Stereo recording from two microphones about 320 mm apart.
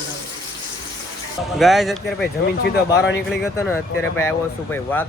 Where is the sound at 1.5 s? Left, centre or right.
Centre.